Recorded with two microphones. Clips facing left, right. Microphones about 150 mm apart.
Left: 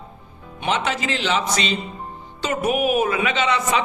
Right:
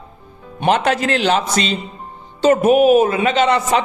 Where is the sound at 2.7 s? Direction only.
30° right (ahead or behind); by 3.8 s 50° right (ahead or behind).